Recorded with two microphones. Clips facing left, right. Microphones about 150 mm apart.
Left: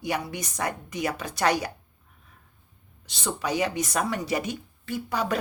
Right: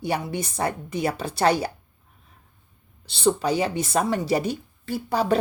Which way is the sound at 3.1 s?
30° right (ahead or behind).